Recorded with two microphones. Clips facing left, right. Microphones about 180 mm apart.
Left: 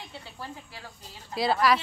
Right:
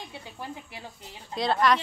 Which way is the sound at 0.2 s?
20° right (ahead or behind).